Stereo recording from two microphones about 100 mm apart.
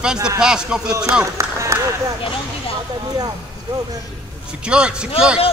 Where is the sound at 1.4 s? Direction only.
30° right (ahead or behind).